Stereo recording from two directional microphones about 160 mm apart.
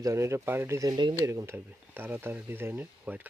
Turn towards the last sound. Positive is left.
turn(degrees=-10)  # may be behind; listen again after turning